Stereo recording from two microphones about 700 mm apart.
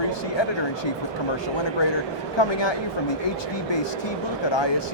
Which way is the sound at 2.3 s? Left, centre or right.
Left.